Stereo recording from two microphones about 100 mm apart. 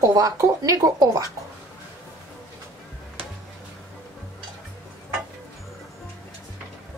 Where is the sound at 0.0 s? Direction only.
35° right (ahead or behind).